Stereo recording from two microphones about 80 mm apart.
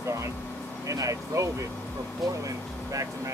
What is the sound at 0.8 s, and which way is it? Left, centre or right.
Speech, right.